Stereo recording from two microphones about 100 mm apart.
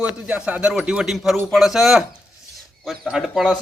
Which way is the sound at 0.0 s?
15° right (ahead or behind).